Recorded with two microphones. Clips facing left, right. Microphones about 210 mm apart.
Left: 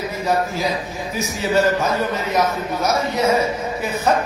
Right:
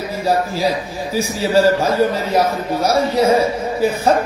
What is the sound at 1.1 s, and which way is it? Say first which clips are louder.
A man's voice: right 4 dB; 30° right (ahead or behind).